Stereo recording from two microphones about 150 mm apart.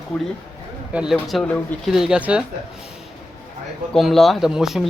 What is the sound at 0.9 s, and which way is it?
Speech, 5° right (ahead or behind).